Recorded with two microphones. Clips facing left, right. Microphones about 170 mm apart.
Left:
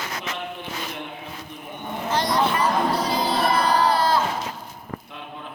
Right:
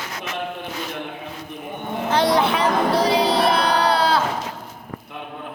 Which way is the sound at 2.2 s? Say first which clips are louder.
Right 4 dB; 65° right (ahead or behind).